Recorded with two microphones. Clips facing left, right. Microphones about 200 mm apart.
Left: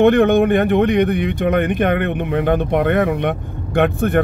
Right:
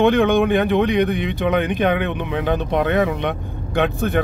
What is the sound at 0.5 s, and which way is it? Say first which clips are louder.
Speech: left 2 dB; 55° left (ahead or behind).